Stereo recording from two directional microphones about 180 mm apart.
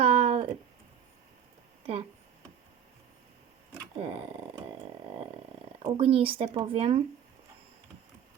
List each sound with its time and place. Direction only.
0.0 s a sound: 30° right (ahead or behind)
3.9 s speech: 30° right (ahead or behind)
5.8 s speech: 30° right (ahead or behind)